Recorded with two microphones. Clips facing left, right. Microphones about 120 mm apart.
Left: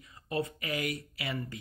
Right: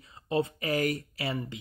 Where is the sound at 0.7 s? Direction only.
40° right (ahead or behind).